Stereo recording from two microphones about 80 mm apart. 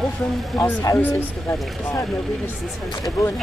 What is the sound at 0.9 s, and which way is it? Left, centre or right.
Speech, left.